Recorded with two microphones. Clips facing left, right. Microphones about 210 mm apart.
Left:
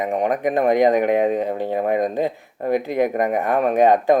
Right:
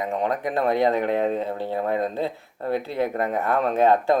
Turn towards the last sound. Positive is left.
turn(degrees=15)  # may be behind; listen again after turning